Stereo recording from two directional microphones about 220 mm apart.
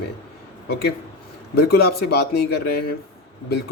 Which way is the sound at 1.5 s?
45° left (ahead or behind).